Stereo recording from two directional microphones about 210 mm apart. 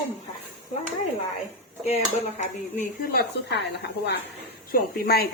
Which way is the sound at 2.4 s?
40° left (ahead or behind).